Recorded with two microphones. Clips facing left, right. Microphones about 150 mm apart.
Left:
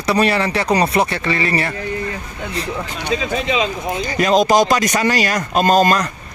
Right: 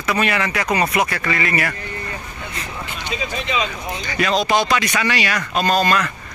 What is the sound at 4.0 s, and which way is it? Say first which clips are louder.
Speech: left 5 dB; 40° left (ahead or behind).